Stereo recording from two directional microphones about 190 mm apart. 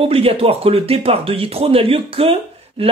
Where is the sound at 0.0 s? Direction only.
30° right (ahead or behind).